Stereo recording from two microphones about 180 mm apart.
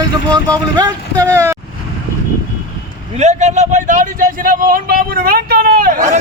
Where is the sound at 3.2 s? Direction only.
40° right (ahead or behind).